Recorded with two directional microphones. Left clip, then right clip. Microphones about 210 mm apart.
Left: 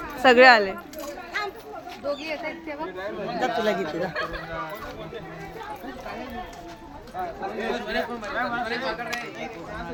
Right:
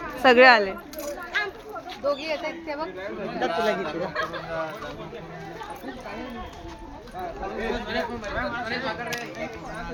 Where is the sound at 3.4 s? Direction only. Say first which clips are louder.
Even; 60° left (ahead or behind).